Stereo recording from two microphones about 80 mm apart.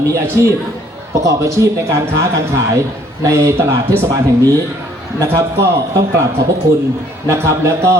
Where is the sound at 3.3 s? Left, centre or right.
Right.